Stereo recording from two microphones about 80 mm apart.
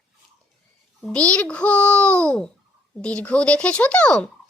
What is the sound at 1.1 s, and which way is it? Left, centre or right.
Speech, centre.